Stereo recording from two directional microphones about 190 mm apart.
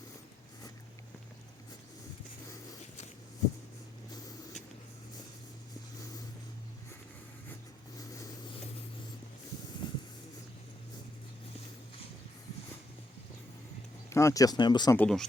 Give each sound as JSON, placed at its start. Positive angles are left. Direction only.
{"t": 9.8, "sound": "vehicle", "side_deg": 25}
{"t": 14.1, "sound": "speech", "side_deg": 15}
{"t": 14.9, "sound": "speech", "side_deg": 5}